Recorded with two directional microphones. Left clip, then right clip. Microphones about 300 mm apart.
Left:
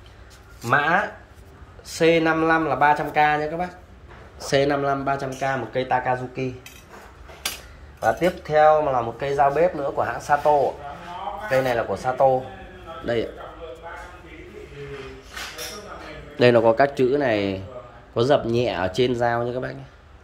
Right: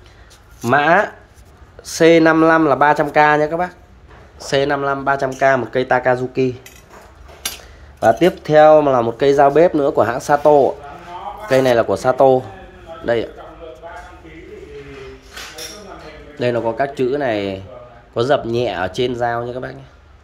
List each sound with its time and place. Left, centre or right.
1.8 s speech: centre
8.0 s speech: right
11.4 s speech: right
13.0 s speech: centre
16.3 s speech: centre